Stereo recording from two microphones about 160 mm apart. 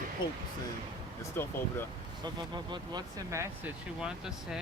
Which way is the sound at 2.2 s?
30° right (ahead or behind).